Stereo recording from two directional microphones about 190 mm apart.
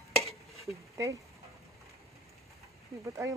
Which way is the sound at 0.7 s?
15° right (ahead or behind).